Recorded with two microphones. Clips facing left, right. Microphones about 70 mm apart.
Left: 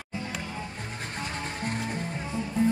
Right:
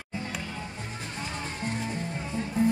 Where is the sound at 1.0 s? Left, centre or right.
Left.